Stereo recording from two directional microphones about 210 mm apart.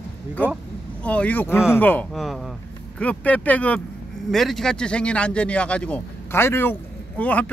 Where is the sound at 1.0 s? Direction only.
5° left (ahead or behind).